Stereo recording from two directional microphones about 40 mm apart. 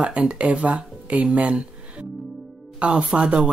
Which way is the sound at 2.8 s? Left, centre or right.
Right.